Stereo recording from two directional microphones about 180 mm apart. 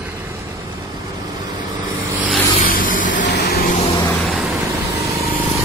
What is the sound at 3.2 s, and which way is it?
Vehicle, 65° left (ahead or behind).